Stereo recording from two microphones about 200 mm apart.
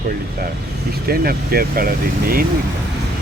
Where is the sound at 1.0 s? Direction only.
50° right (ahead or behind).